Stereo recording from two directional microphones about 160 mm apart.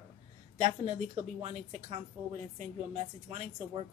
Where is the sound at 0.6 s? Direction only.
45° right (ahead or behind).